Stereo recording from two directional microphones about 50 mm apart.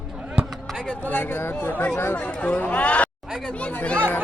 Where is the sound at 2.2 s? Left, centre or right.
Left.